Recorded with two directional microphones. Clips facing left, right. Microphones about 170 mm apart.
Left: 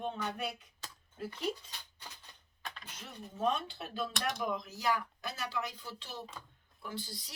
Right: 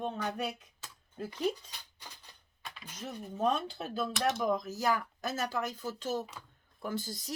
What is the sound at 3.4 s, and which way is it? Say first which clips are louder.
Speech: right 2 dB; 45° right (ahead or behind).